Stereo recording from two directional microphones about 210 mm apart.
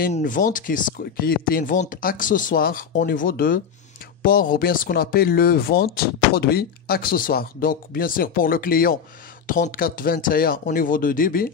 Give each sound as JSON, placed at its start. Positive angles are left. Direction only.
{"t": 0.0, "sound": "speech", "side_deg": 40}